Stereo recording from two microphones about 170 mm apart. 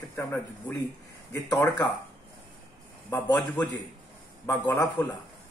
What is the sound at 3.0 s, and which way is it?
A man's voice, 15° left (ahead or behind).